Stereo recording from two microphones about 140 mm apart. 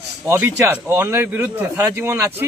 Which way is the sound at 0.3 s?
15° right (ahead or behind).